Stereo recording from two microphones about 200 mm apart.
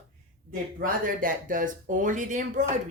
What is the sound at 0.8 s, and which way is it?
Speech, 45° right (ahead or behind).